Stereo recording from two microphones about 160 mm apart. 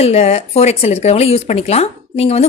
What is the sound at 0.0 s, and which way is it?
Speech, 40° left (ahead or behind).